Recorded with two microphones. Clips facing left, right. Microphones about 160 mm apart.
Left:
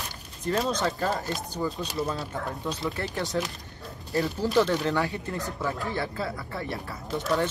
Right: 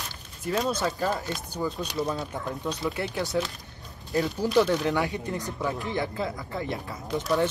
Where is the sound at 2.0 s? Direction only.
15° right (ahead or behind).